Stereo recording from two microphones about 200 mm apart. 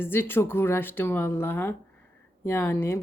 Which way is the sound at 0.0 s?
10° left (ahead or behind).